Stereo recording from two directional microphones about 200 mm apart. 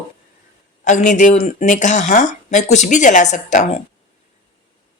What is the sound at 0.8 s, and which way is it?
A woman's voice, 40° left (ahead or behind).